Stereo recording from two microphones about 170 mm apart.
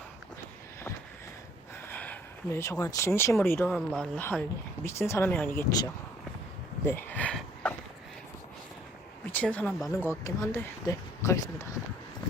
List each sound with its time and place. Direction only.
1.9 s speech: 10° left (ahead or behind)
6.8 s a sound: 10° left (ahead or behind)
9.3 s speech: 10° left (ahead or behind)